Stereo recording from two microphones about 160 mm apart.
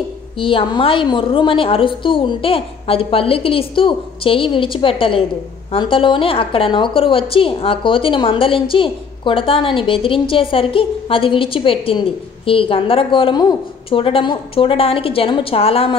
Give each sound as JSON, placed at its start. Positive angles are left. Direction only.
{"t": 0.4, "sound": "a woman's voice", "side_deg": 35}